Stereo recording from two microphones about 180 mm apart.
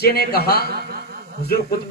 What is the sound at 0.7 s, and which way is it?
Speech, 60° right (ahead or behind).